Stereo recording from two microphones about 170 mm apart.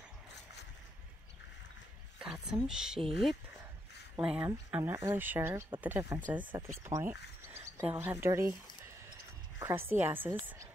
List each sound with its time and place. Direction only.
2.1 s speech: 5° right (ahead or behind)
9.6 s a woman's voice: 15° right (ahead or behind)